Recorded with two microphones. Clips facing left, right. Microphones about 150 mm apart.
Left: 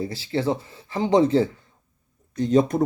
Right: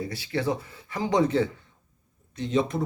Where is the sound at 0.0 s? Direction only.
30° left (ahead or behind).